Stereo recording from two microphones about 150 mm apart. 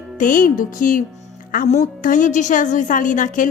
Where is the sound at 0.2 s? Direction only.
65° left (ahead or behind).